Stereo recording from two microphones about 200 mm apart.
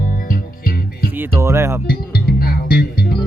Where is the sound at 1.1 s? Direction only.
15° right (ahead or behind).